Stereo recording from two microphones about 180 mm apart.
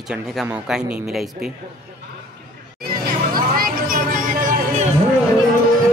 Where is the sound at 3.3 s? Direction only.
55° right (ahead or behind).